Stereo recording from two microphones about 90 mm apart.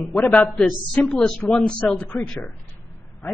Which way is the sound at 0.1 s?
5° left (ahead or behind).